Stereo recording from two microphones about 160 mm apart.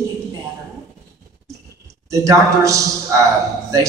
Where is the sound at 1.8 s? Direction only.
20° right (ahead or behind).